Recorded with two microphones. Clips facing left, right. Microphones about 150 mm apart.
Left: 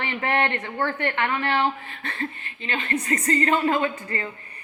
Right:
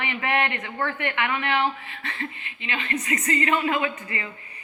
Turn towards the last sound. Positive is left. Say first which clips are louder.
# left 2 dB
turn(degrees=40)  # may be behind; listen again after turning